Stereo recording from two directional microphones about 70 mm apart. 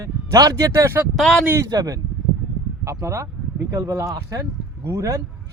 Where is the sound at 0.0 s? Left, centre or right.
Right.